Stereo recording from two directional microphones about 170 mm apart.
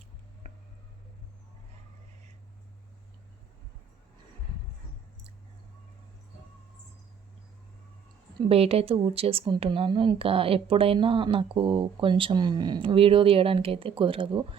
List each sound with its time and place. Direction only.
8.4 s speech: 35° right (ahead or behind)